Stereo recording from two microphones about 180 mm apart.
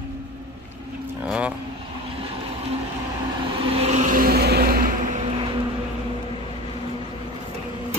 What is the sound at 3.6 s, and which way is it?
Vehicle, 35° right (ahead or behind).